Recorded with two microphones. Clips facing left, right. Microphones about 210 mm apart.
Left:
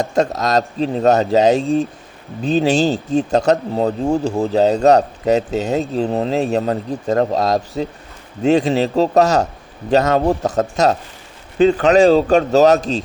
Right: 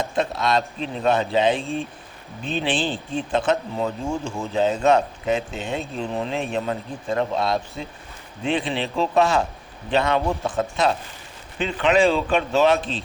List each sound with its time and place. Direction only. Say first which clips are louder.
0.0 s speech: left 6 dB; 45° left (ahead or behind)